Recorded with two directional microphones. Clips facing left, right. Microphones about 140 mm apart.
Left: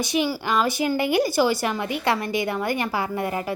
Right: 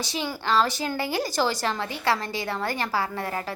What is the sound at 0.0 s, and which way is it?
A woman's voice, 15° left (ahead or behind).